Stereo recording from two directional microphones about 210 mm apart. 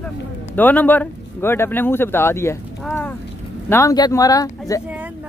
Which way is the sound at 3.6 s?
15° left (ahead or behind).